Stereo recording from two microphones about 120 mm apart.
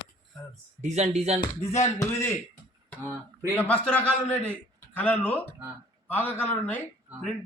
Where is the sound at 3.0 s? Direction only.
25° right (ahead or behind).